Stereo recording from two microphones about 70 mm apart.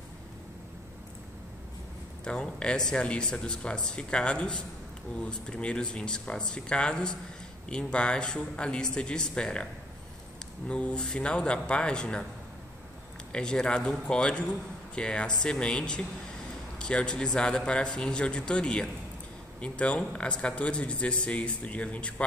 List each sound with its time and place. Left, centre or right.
2.2 s speech: centre
10.7 s speech: centre
13.3 s speech: centre